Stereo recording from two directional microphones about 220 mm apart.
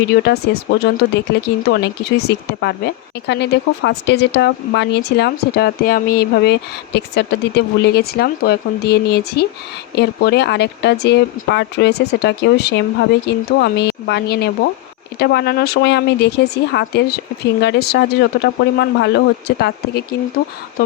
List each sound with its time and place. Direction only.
0.0 s speech: 50° left (ahead or behind)